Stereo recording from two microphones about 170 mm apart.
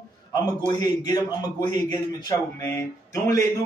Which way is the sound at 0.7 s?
20° left (ahead or behind).